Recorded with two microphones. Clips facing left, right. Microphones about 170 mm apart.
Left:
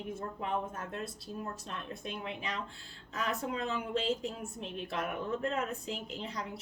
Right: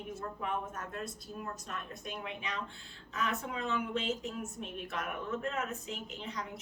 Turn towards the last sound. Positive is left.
turn(degrees=35)  # may be behind; listen again after turning